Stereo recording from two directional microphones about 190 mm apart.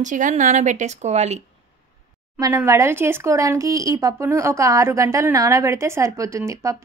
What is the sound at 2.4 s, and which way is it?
Speech, 15° right (ahead or behind).